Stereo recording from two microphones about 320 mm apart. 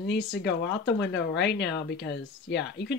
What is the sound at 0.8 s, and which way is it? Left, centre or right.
Speech, left.